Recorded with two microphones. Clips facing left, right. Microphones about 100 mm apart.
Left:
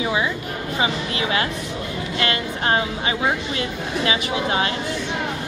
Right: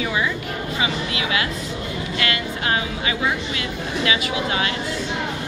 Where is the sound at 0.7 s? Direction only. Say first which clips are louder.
Left 3 dB; 35° left (ahead or behind).